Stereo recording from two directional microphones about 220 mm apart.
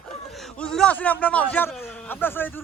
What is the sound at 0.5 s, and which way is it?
A man's voice, 5° left (ahead or behind).